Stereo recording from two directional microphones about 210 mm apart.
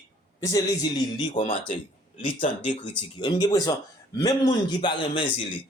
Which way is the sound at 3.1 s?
20° left (ahead or behind).